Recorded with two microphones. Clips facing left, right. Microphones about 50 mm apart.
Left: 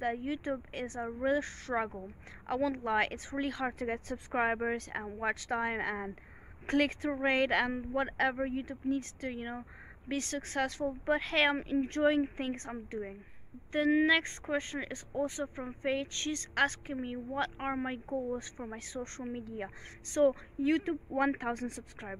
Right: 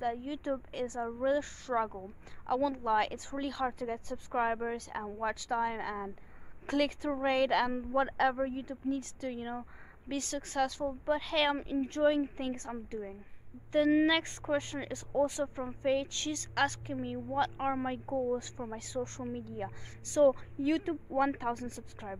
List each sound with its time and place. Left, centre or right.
0.0 s a woman's voice: left
1.2 s a woman's voice: left
10.0 s a woman's voice: left; by 18.7 s centre
19.2 s a woman's voice: left
21.5 s speech: left